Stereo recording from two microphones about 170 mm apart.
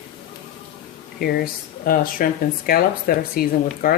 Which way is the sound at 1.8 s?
55° left (ahead or behind).